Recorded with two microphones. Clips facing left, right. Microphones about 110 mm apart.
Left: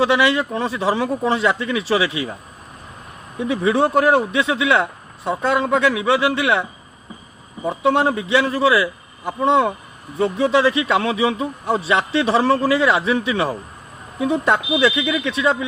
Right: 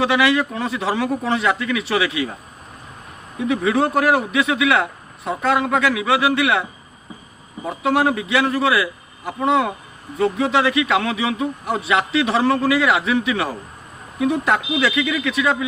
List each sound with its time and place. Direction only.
0.2 s a man's voice: 25° left (ahead or behind)
3.5 s a man's voice: 25° left (ahead or behind)
7.8 s a man's voice: 25° left (ahead or behind)